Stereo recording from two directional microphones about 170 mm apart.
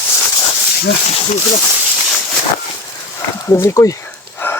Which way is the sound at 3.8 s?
15° left (ahead or behind).